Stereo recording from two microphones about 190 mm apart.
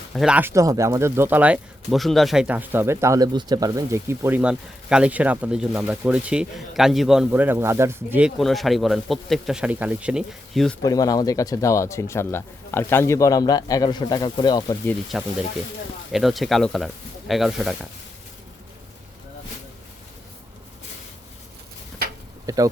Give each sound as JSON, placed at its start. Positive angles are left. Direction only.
{"t": 0.1, "sound": "speech", "side_deg": -5}
{"t": 8.4, "sound": "speech", "side_deg": 0}
{"t": 10.8, "sound": "speech", "side_deg": 20}
{"t": 15.1, "sound": "speech", "side_deg": 0}
{"t": 22.4, "sound": "speech", "side_deg": -15}